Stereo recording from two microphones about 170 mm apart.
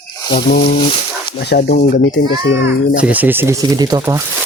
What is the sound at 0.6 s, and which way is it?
Speech, 35° left (ahead or behind).